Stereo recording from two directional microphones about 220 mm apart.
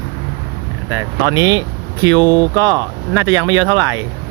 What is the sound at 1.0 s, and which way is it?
Speech, 15° right (ahead or behind).